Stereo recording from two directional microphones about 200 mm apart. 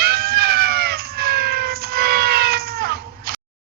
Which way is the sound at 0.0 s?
50° right (ahead or behind).